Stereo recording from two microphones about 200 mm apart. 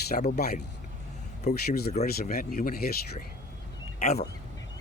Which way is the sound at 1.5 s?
35° left (ahead or behind).